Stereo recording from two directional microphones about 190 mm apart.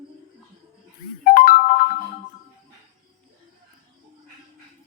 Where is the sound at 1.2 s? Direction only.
45° left (ahead or behind).